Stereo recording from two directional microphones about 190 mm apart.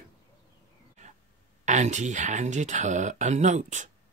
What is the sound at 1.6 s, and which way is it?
Speech, 40° right (ahead or behind).